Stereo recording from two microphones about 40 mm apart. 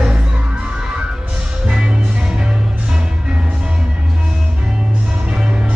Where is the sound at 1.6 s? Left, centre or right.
Right.